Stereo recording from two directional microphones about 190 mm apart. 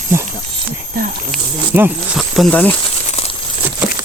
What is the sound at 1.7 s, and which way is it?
Speech, 5° right (ahead or behind).